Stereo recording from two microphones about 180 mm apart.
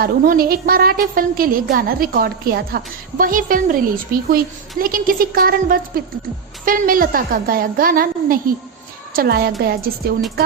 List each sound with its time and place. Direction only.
0.0 s a woman's voice: 55° right (ahead or behind)
4.8 s a woman's voice: 50° right (ahead or behind)